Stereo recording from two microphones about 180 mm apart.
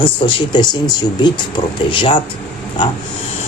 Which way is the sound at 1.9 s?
30° left (ahead or behind).